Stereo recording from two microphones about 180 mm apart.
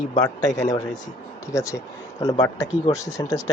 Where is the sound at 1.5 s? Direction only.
20° left (ahead or behind).